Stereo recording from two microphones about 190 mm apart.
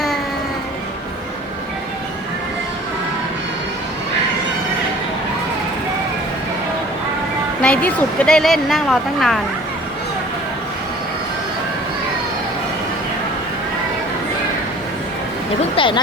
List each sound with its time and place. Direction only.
7.6 s speech: 5° left (ahead or behind)
15.7 s speech: 25° left (ahead or behind)